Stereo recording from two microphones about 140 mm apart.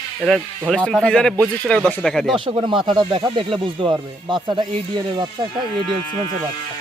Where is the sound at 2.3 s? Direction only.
35° right (ahead or behind).